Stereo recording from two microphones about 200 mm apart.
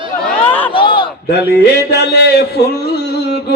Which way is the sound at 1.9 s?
55° left (ahead or behind).